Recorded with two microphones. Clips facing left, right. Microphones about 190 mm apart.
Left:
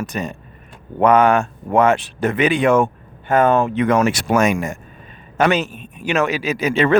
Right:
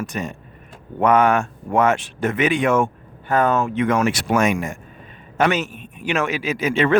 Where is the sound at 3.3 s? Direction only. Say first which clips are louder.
Left 4 dB; 25° left (ahead or behind).